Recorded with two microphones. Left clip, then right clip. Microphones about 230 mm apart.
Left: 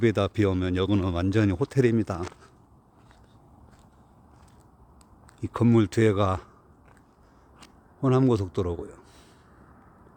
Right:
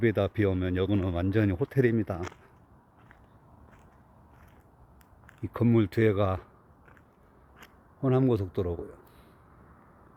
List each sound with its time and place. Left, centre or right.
0.0 s speech: centre
5.4 s speech: centre
8.0 s speech: centre